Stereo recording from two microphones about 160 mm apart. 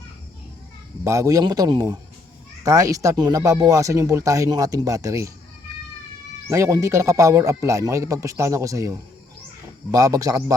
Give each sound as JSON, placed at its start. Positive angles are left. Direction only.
{"t": 1.0, "sound": "speech", "side_deg": -20}
{"t": 6.5, "sound": "speech", "side_deg": -20}